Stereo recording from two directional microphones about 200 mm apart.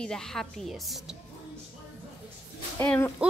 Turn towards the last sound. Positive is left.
turn(degrees=10)  # may be behind; listen again after turning